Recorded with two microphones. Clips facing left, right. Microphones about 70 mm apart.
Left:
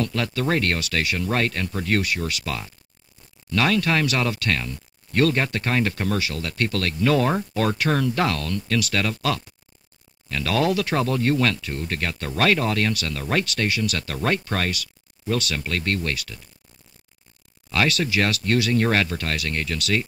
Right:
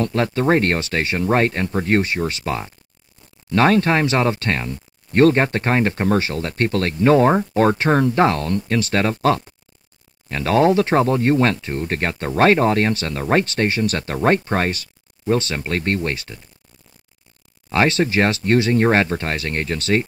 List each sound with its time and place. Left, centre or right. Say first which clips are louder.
0.0 s speech: right 6 dB; right
17.6 s speech: right 5 dB; right